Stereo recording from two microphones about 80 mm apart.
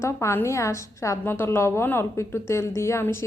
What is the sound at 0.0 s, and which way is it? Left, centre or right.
Speech, left.